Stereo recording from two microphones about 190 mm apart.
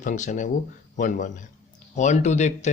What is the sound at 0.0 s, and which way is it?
A man's voice, 40° left (ahead or behind).